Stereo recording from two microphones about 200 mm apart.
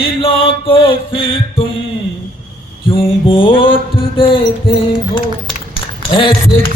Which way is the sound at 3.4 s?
25° left (ahead or behind).